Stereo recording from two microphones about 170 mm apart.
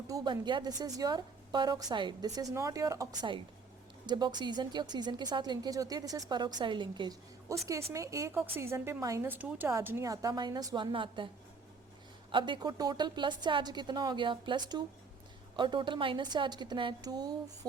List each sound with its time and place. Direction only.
0.1 s a woman's voice: 25° right (ahead or behind)
12.3 s a woman's voice: 30° right (ahead or behind)